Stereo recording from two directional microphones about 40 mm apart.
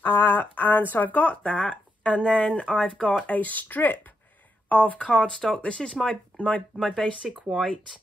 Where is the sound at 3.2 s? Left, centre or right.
Left.